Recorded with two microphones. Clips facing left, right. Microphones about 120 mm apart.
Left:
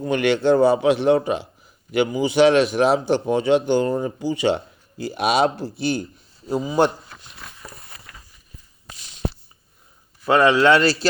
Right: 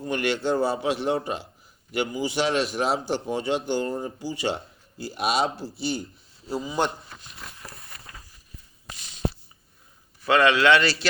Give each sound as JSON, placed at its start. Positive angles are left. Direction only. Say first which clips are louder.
{"t": 0.0, "sound": "a man's voice", "louder": "left 7 dB", "side_deg": 85}
{"t": 10.3, "sound": "a man's voice", "louder": "left 4 dB", "side_deg": 20}
{"t": 10.6, "sound": "a man's voice", "louder": "left 4 dB", "side_deg": 40}